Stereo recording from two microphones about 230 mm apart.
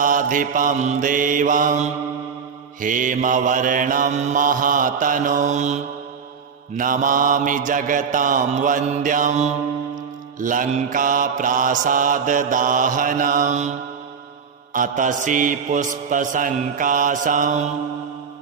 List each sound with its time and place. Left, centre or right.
0.0 s mantra: right